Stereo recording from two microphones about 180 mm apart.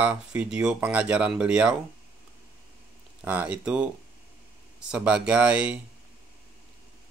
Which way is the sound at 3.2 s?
10° right (ahead or behind).